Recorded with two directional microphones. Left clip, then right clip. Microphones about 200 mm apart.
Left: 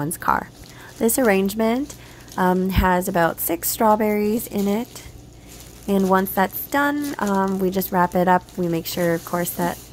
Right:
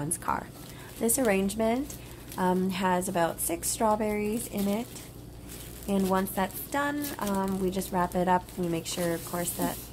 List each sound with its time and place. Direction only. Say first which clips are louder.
0.0 s speech: left 10 dB; 35° left (ahead or behind)
5.9 s speech: left 9 dB; 35° left (ahead or behind)